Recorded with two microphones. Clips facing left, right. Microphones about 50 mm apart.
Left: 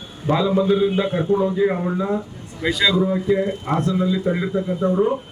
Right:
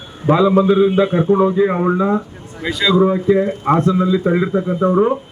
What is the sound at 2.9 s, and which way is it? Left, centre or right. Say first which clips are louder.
A man's voice: right 6 dB; right.